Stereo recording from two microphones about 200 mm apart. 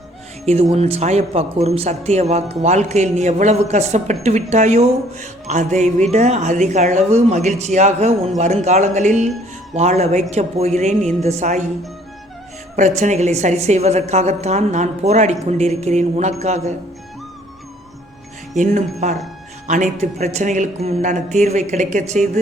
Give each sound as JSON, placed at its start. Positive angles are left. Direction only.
{"t": 0.4, "sound": "speech", "side_deg": -30}
{"t": 12.7, "sound": "speech", "side_deg": -35}
{"t": 18.5, "sound": "speech", "side_deg": -35}